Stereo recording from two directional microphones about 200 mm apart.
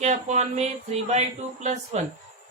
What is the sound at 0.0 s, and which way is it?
Speech, 35° right (ahead or behind).